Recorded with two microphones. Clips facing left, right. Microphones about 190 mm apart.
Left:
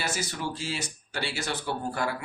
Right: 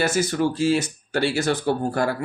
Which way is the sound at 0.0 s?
50° right (ahead or behind).